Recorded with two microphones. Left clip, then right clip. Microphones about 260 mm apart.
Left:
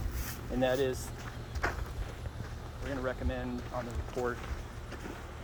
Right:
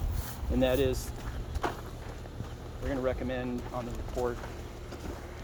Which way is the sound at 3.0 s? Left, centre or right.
Right.